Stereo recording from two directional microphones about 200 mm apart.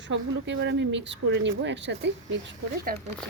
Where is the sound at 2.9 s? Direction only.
45° right (ahead or behind).